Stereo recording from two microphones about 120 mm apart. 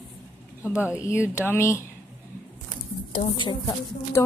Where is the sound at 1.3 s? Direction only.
20° left (ahead or behind).